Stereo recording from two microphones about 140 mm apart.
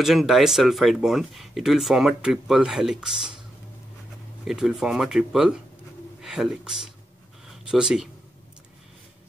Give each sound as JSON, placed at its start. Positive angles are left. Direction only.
{"t": 0.0, "sound": "speech", "side_deg": 0}
{"t": 4.5, "sound": "speech", "side_deg": -5}